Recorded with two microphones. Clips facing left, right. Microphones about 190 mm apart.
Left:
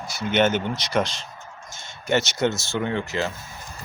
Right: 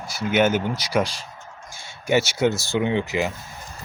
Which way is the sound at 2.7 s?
15° right (ahead or behind).